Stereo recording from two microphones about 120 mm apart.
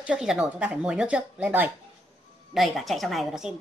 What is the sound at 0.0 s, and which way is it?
Speech, 5° right (ahead or behind).